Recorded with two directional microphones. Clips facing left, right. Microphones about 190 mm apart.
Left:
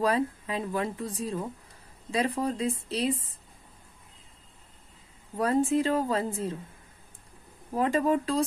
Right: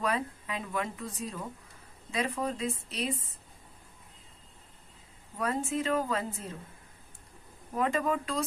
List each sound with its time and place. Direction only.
0.0 s speech: 35° left (ahead or behind)
5.4 s speech: 35° left (ahead or behind)
7.7 s speech: 35° left (ahead or behind)